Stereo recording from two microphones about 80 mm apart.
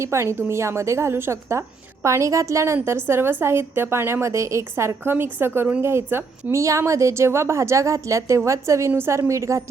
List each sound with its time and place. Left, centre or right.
0.0 s a woman's voice: right
5.8 s a woman's voice: right